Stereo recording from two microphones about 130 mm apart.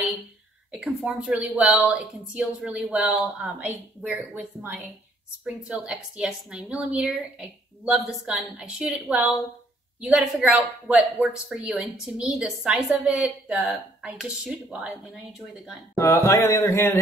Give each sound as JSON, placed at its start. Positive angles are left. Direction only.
{"t": 0.7, "sound": "speech", "side_deg": -5}
{"t": 16.0, "sound": "mantra", "side_deg": 20}